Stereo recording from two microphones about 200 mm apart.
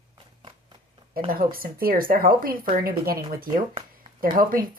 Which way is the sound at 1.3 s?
50° right (ahead or behind).